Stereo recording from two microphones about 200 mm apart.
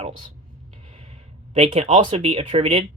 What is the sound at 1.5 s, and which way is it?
Speech, 30° right (ahead or behind).